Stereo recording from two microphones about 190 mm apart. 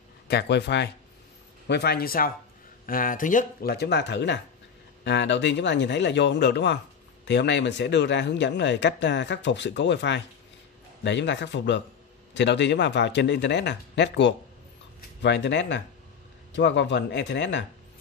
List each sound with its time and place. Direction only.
0.3 s speech: 60° left (ahead or behind); by 3.7 s 45° left (ahead or behind)
3.7 s speech: 60° left (ahead or behind)